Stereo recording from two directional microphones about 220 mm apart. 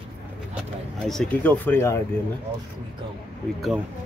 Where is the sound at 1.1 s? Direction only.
5° left (ahead or behind).